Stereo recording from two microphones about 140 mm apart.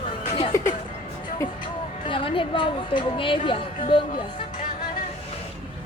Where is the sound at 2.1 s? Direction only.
40° left (ahead or behind).